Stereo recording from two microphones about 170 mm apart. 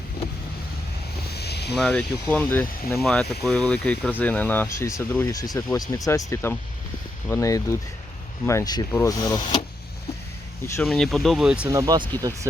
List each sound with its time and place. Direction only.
1.3 s a sound: 70° left (ahead or behind)
1.8 s speech: 5° left (ahead or behind); by 9.6 s 25° left (ahead or behind)
10.8 s speech: centre (ahead or behind)
11.7 s speech: 20° right (ahead or behind)